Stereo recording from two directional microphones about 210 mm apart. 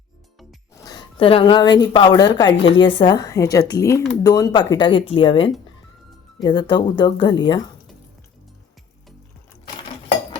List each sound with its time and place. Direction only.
0.9 s a woman's voice: 25° left (ahead or behind)
2.6 s a woman's voice: 65° left (ahead or behind)
2.8 s speech: 25° left (ahead or behind)